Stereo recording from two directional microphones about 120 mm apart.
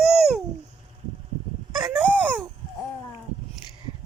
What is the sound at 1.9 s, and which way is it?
Wail, 15° right (ahead or behind).